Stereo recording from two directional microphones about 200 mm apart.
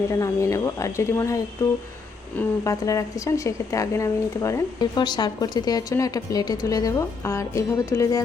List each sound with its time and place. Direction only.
0.1 s a woman's voice: 15° left (ahead or behind)